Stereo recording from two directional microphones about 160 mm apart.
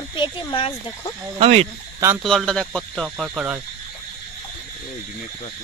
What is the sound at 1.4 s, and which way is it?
Speech, 40° right (ahead or behind).